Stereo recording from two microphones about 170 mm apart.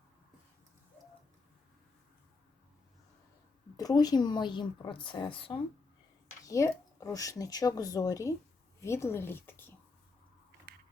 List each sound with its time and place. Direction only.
3.8 s speech: 20° left (ahead or behind)
6.4 s speech: 20° left (ahead or behind)
10.7 s a sound: 70° right (ahead or behind)